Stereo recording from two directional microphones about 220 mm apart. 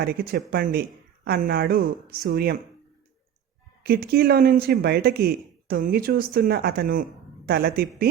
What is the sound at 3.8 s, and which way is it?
Speech, 45° right (ahead or behind).